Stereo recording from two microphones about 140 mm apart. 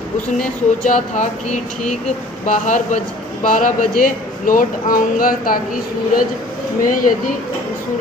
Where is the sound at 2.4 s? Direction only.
60° left (ahead or behind).